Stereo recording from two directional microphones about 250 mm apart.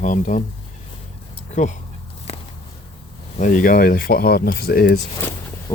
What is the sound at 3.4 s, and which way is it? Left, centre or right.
Speech, left.